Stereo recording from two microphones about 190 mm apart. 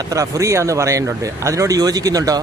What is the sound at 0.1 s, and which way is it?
Speech, 15° right (ahead or behind).